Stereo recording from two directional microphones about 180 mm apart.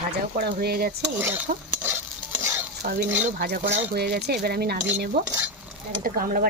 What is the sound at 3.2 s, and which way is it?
Speech, 60° right (ahead or behind).